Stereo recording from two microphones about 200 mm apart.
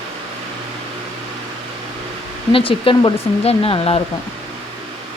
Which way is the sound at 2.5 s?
25° left (ahead or behind).